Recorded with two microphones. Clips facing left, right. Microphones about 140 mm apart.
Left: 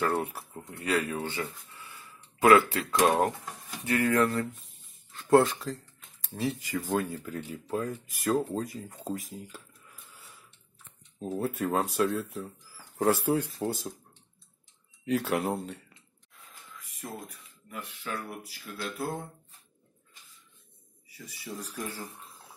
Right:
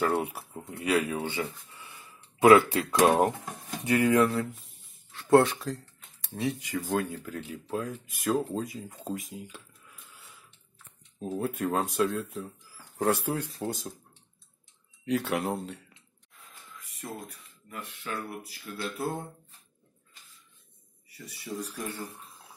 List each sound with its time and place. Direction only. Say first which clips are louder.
0.0 s speech: right 1 dB; 10° right (ahead or behind)
11.2 s speech: even; 5° left (ahead or behind)
15.0 s speech: left 1 dB; centre (ahead or behind)
17.6 s speech: even; 5° left (ahead or behind)
21.3 s speech: right 4 dB; centre (ahead or behind)